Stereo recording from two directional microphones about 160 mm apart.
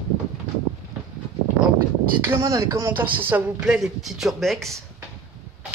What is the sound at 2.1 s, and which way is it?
Speech, 15° right (ahead or behind).